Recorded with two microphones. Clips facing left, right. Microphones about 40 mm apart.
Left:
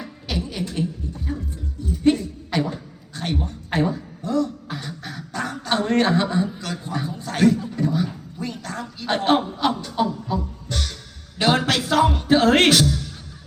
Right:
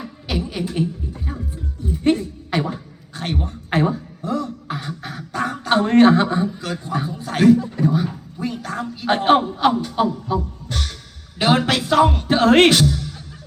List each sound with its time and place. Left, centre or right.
0.0 s speech: centre
1.8 s a sound: right
4.2 s beatboxing: right
7.2 s music: centre
7.8 s a sound: centre
11.8 s music: centre